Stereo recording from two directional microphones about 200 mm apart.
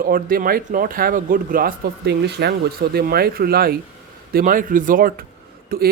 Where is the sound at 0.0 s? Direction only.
45° right (ahead or behind).